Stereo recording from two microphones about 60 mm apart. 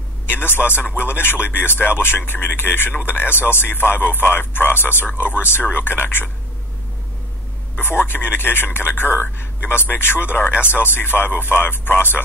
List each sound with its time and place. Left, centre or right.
0.3 s speech: left
7.7 s speech: left